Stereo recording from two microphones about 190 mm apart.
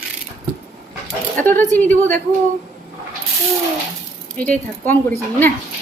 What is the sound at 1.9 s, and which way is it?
Speech, 40° right (ahead or behind).